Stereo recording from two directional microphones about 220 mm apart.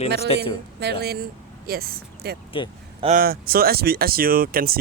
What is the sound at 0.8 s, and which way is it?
Speech, 45° right (ahead or behind).